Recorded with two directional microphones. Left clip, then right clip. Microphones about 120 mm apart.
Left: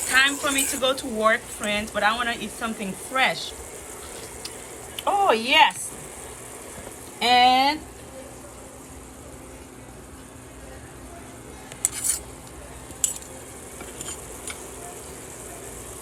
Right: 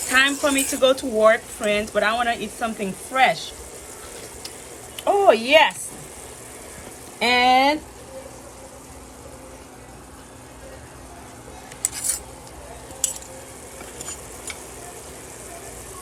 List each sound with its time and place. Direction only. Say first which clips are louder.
0.1 s speech: right 2 dB; centre (ahead or behind)
4.9 s a woman's voice: right 4 dB; 30° left (ahead or behind)
7.2 s a woman's voice: right 1 dB; 25° left (ahead or behind)